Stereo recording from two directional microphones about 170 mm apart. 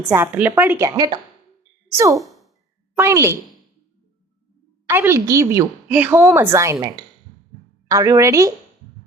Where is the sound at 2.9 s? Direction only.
15° right (ahead or behind).